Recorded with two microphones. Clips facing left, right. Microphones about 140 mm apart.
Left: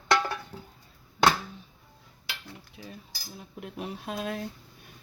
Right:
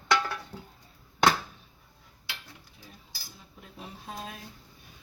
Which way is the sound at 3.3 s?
65° left (ahead or behind).